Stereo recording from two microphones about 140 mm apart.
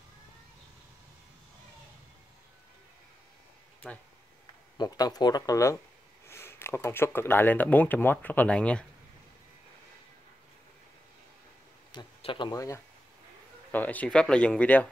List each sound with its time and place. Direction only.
4.7 s speech: 25° left (ahead or behind); by 8.8 s 10° left (ahead or behind)
11.9 s speech: 35° left (ahead or behind)
12.5 s speech: 25° left (ahead or behind)
13.7 s speech: 10° left (ahead or behind)